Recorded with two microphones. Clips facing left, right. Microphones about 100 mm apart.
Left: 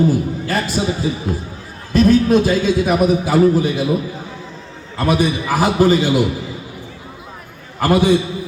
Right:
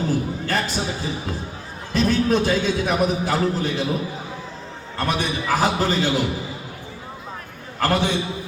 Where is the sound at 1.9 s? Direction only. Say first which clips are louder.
Left 7 dB; 5° left (ahead or behind).